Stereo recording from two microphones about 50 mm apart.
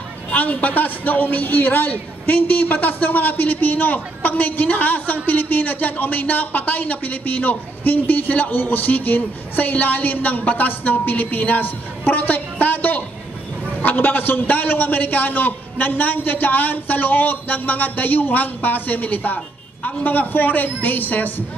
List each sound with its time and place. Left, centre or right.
0.3 s a man's voice: left